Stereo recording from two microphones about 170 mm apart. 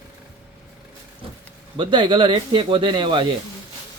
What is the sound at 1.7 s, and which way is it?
Speech, 30° right (ahead or behind).